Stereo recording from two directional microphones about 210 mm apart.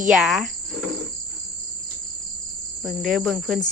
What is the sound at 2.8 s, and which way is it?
Cricket, centre (ahead or behind).